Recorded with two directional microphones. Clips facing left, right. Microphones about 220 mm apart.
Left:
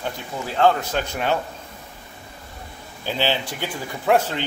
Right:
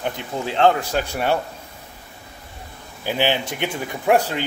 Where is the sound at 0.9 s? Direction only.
10° right (ahead or behind).